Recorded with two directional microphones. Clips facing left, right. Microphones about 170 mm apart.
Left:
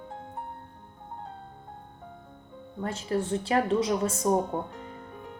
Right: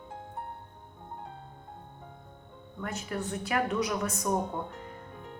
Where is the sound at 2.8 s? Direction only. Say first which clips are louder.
Left 6 dB; 30° left (ahead or behind).